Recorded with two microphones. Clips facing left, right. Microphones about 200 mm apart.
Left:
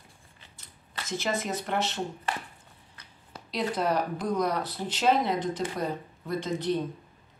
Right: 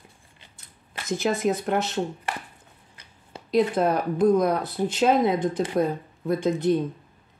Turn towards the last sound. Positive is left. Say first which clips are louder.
# right 7 dB
turn(degrees=-50)  # may be behind; listen again after turning